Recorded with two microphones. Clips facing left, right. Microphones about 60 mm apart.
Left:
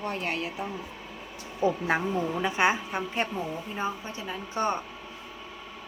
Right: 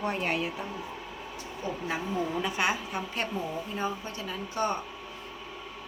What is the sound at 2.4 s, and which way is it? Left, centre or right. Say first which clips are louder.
A woman's voice: left 4 dB; left.